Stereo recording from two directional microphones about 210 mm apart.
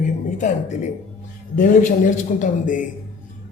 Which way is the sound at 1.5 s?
40° left (ahead or behind).